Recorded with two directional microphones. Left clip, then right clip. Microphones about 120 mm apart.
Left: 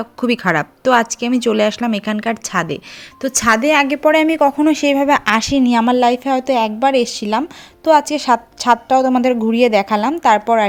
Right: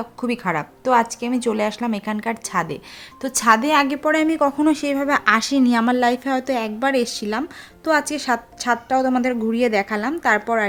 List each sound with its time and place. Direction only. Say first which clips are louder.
0.0 s speech: left 7 dB; 30° left (ahead or behind)